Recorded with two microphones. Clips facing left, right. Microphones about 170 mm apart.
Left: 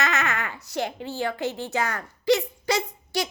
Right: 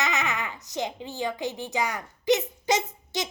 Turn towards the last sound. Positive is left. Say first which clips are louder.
# left 3 dB
turn(degrees=-20)  # may be behind; listen again after turning